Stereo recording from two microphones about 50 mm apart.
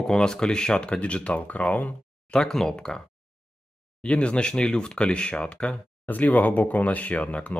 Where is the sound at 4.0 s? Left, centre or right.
Left.